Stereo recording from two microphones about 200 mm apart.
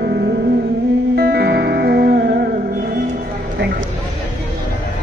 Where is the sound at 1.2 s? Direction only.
50° right (ahead or behind).